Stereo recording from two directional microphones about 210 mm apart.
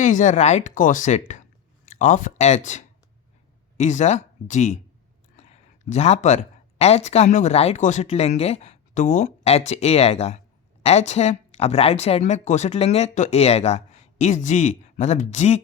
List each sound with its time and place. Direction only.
0.0 s speech: 35° left (ahead or behind)